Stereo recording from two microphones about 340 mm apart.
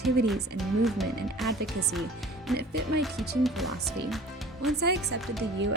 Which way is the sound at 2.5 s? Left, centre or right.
Centre.